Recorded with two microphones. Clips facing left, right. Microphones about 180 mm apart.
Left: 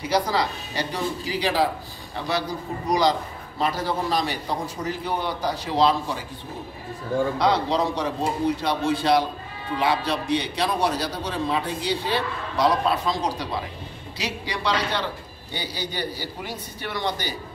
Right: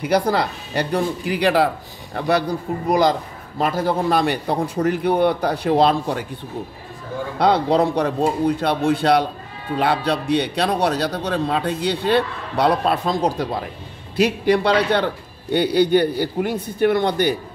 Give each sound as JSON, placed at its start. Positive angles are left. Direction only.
{"t": 0.0, "sound": "speech", "side_deg": -55}
{"t": 7.3, "sound": "speech", "side_deg": -55}